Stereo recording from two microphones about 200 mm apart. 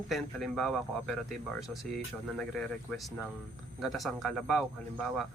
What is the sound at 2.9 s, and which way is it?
Speech, centre (ahead or behind).